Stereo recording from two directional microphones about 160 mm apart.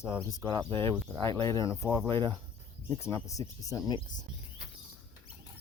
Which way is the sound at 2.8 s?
15° left (ahead or behind).